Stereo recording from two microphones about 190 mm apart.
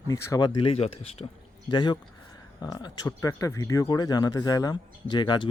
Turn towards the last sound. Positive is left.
turn(degrees=25)  # may be behind; listen again after turning